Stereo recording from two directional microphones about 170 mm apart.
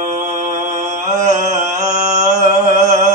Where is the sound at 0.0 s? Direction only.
50° right (ahead or behind).